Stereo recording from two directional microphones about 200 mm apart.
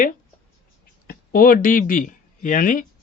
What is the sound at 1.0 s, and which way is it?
Speech, 45° left (ahead or behind).